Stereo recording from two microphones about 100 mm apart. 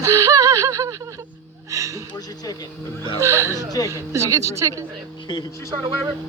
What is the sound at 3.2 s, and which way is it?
Speech, 30° right (ahead or behind).